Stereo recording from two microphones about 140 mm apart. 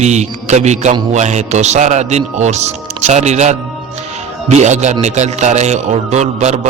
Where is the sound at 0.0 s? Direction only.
55° right (ahead or behind).